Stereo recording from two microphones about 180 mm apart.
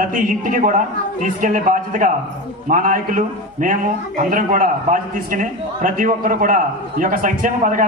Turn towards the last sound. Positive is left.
turn(degrees=-50)  # may be behind; listen again after turning